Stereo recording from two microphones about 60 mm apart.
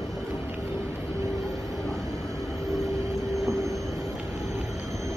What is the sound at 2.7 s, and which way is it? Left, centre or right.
Vehicle, right.